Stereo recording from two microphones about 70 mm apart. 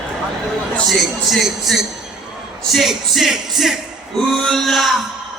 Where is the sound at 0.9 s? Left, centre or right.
Centre.